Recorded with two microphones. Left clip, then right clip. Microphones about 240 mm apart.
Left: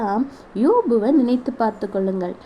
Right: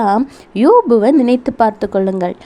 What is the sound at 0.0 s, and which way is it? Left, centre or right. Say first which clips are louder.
A woman's voice: right 8 dB; right.